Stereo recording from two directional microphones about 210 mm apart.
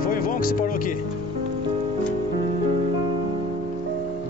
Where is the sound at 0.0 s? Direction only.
40° left (ahead or behind).